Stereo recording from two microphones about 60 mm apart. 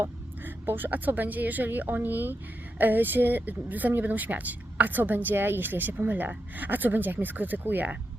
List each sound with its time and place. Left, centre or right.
0.0 s speech: right